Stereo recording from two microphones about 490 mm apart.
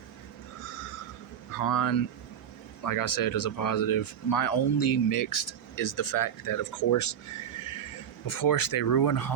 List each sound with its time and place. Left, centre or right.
1.5 s speech: left
8.3 s speech: left